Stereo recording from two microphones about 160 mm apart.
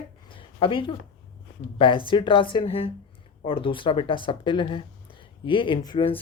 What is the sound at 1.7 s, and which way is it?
Speech, 30° left (ahead or behind).